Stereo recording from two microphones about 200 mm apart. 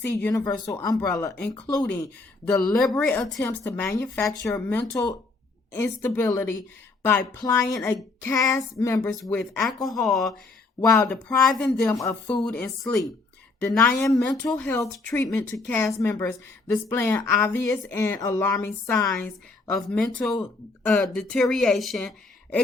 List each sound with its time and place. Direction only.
0.0 s speech: 10° left (ahead or behind)
9.2 s speech: 5° left (ahead or behind)
10.8 s speech: 15° left (ahead or behind)